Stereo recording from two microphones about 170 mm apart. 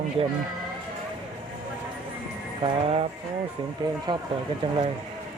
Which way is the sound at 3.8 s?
25° right (ahead or behind).